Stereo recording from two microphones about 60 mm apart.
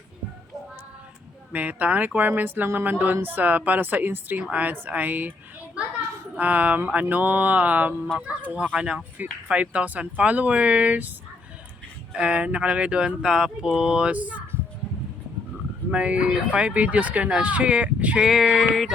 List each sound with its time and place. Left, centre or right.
1.5 s a woman's voice: right
6.3 s speech: right
12.1 s speech: centre
15.9 s speech: centre
18.7 s a sound: centre